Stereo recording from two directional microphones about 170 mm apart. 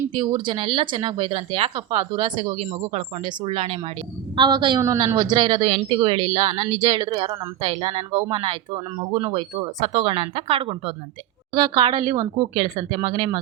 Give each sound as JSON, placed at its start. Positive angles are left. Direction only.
{"t": 0.1, "sound": "speech", "side_deg": -30}
{"t": 4.4, "sound": "a woman's voice", "side_deg": -25}